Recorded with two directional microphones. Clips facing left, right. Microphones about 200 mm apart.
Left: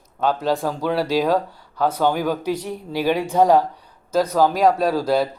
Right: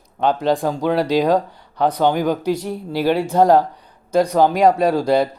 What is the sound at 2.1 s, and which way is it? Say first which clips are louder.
Speech: right 3 dB; 5° left (ahead or behind).